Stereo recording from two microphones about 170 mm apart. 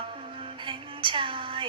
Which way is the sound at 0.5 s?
30° right (ahead or behind).